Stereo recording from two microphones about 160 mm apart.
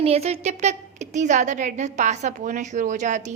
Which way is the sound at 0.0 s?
40° right (ahead or behind).